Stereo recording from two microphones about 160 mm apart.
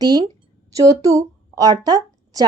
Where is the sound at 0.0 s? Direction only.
25° right (ahead or behind).